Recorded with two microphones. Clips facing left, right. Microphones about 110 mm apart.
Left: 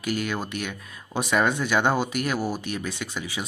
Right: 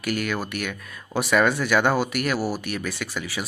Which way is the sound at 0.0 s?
20° left (ahead or behind).